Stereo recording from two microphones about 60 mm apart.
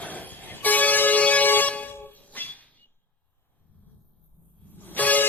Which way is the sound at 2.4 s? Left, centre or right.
Left.